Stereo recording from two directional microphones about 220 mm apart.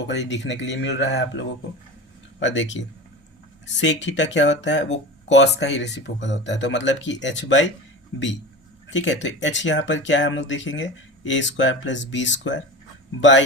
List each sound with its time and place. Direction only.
0.1 s speech: 50° left (ahead or behind)